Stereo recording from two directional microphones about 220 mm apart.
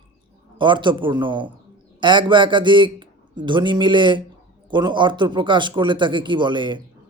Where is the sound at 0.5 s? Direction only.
20° right (ahead or behind).